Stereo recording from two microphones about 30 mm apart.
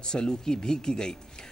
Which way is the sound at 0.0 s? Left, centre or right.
Left.